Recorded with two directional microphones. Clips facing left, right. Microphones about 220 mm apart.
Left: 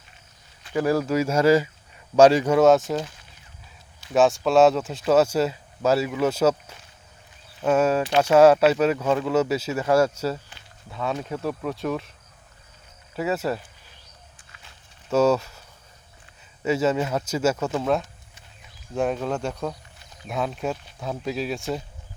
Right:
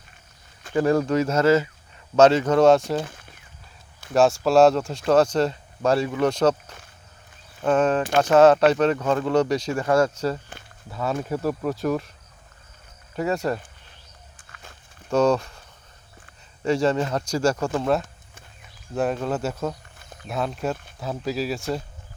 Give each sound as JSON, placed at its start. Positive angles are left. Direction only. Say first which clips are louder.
{"t": 0.7, "sound": "speech", "louder": "right 2 dB", "side_deg": 5}
{"t": 3.0, "sound": "speech", "louder": "right 2 dB", "side_deg": -55}
{"t": 4.1, "sound": "speech", "louder": "right 1 dB", "side_deg": 0}
{"t": 13.1, "sound": "speech", "louder": "right 1 dB", "side_deg": 5}
{"t": 14.5, "sound": "walk", "louder": "right 8 dB", "side_deg": -50}
{"t": 15.1, "sound": "speech", "louder": "even", "side_deg": 5}
{"t": 16.6, "sound": "speech", "louder": "right 1 dB", "side_deg": 5}